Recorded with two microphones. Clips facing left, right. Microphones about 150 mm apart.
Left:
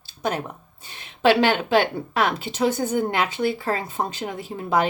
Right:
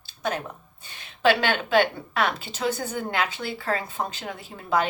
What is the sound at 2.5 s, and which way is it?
Speech, 20° left (ahead or behind).